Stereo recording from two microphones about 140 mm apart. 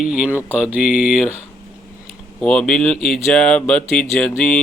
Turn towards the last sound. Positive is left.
turn(degrees=5)  # may be behind; listen again after turning